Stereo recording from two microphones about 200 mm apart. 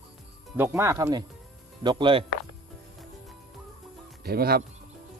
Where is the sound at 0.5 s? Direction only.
10° right (ahead or behind).